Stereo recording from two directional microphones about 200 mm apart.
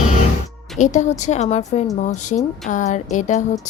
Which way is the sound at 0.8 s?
40° left (ahead or behind).